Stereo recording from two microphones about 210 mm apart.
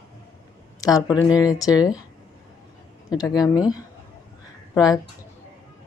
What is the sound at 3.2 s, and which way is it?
Speech, 20° left (ahead or behind).